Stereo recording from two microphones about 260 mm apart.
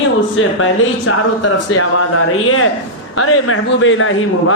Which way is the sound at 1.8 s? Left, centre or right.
Left.